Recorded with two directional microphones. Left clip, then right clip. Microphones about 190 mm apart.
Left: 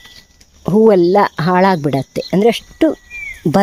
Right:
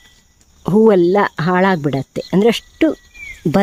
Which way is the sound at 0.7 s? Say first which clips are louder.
Left 2 dB; centre (ahead or behind).